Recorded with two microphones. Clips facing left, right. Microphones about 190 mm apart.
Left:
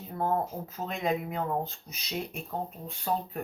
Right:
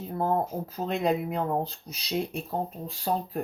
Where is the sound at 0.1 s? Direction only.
35° right (ahead or behind).